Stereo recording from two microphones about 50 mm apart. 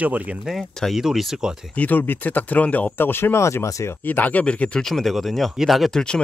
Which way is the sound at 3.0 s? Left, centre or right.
Left.